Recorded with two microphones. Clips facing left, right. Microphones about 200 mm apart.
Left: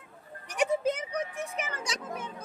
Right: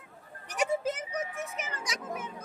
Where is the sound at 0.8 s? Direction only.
5° right (ahead or behind).